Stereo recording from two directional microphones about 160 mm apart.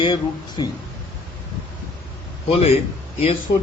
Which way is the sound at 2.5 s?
40° left (ahead or behind).